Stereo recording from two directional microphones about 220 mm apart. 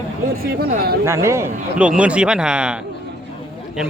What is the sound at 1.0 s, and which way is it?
Speech, 10° right (ahead or behind).